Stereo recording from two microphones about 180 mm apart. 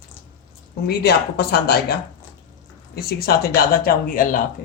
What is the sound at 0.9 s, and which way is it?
Speech, 65° left (ahead or behind).